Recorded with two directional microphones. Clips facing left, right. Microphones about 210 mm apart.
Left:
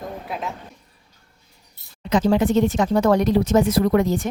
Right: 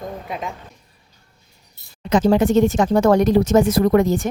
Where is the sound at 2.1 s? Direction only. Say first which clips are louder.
Right 3 dB; 45° right (ahead or behind).